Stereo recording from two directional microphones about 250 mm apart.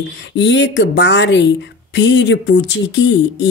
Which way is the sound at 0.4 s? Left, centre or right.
Left.